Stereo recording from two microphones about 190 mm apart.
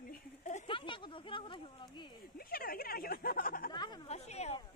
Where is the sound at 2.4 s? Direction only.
50° left (ahead or behind).